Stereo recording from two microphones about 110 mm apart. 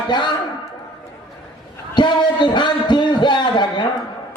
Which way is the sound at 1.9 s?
45° left (ahead or behind).